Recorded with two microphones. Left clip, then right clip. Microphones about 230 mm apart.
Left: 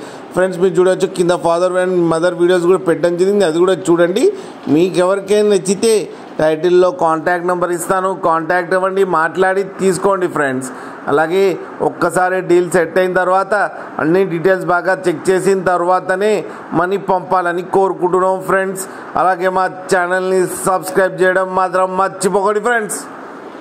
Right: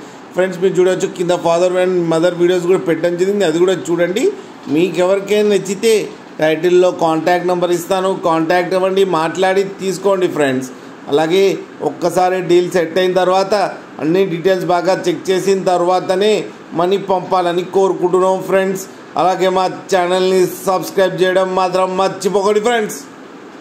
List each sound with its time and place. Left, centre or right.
0.4 s a man's voice: left